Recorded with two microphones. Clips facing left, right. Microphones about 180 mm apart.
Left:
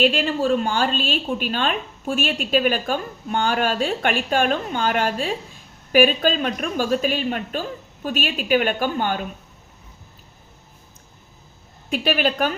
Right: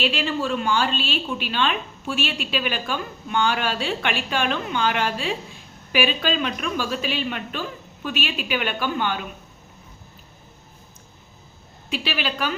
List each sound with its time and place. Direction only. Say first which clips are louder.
0.0 s a woman's voice: left 5 dB; 45° left (ahead or behind)
11.9 s a woman's voice: left 6 dB; 50° left (ahead or behind)